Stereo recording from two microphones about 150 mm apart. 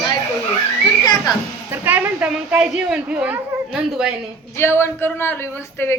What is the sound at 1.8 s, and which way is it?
A woman's voice, 10° right (ahead or behind).